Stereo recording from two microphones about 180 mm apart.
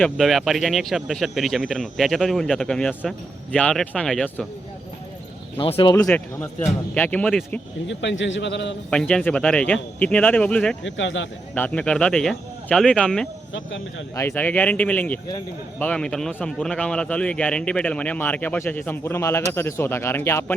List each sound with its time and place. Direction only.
0.0 s speech: centre (ahead or behind)
5.5 s speech: 30° left (ahead or behind)
6.1 s a man's voice: 10° left (ahead or behind)
7.9 s a man's voice: 90° left
8.9 s speech: 5° left (ahead or behind)
10.8 s speech: 90° left
11.5 s speech: 10° left (ahead or behind)
13.5 s speech: 90° left
14.2 s a man's voice: 10° left (ahead or behind)